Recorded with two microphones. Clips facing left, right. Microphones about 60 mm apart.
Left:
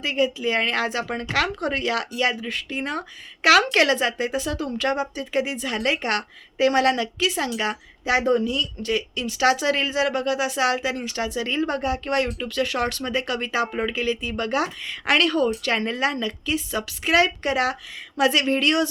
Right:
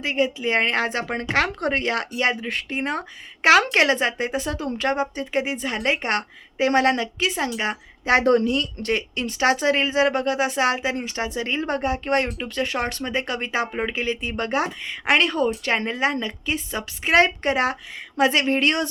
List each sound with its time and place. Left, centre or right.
0.0 s speech: right
8.2 s speech: right
9.4 s speech: right